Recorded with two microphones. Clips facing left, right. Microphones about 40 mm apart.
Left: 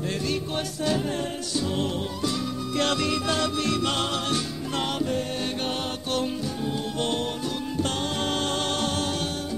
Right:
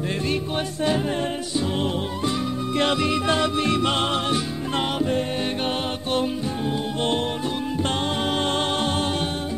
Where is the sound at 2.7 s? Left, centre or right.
Centre.